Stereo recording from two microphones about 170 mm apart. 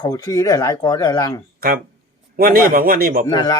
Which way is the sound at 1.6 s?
65° right (ahead or behind).